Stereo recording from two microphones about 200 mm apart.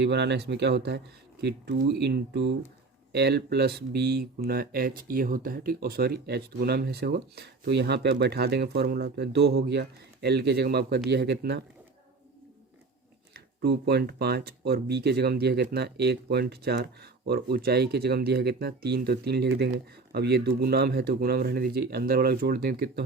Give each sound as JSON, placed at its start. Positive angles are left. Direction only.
{"t": 0.0, "sound": "speech", "side_deg": -60}
{"t": 13.3, "sound": "speech", "side_deg": -55}